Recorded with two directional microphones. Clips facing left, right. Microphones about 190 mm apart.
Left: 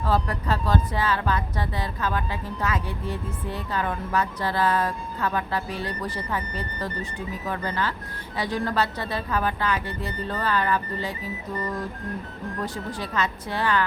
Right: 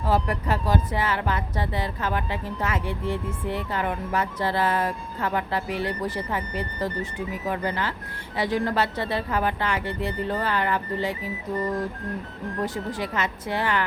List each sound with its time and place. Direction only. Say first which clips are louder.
0.1 s speech: right 1 dB; 20° right (ahead or behind)
12.6 s speech: right 3 dB; 20° right (ahead or behind)